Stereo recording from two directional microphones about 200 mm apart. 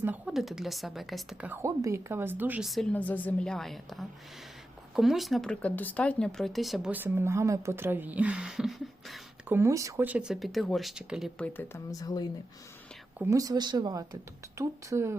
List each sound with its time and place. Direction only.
0.0 s speech: 5° right (ahead or behind)
9.6 s speech: 15° right (ahead or behind); by 12.3 s 20° left (ahead or behind)
13.1 s speech: 15° right (ahead or behind)